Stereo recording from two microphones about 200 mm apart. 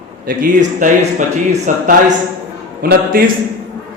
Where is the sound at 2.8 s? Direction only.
50° right (ahead or behind).